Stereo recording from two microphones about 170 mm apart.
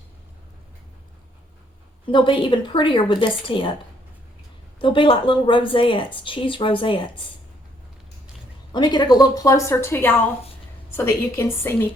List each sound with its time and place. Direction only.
2.0 s speech: 30° left (ahead or behind)
4.8 s speech: 30° left (ahead or behind)
8.7 s a woman's voice: 25° left (ahead or behind)